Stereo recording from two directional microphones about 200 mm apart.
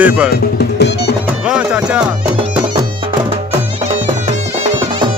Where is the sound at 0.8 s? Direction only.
55° left (ahead or behind).